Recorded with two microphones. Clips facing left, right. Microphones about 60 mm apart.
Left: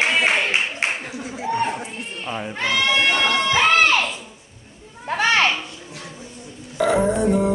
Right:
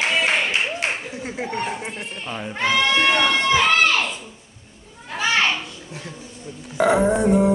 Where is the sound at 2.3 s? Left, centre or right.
Centre.